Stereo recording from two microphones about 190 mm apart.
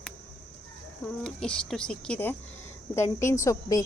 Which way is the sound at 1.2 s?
5° left (ahead or behind).